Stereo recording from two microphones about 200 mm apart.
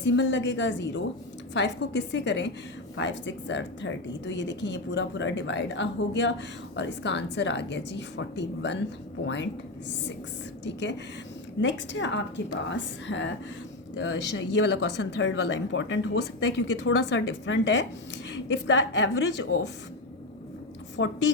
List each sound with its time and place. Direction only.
0.0 s speech: 65° left (ahead or behind)
10.6 s a woman's voice: 60° left (ahead or behind)
20.9 s speech: 60° left (ahead or behind)